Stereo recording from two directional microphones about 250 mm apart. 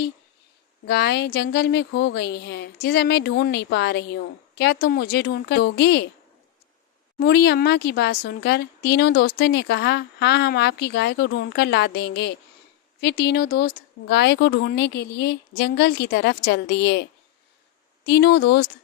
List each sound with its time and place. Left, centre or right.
0.9 s a woman's voice: left
7.2 s a woman's voice: left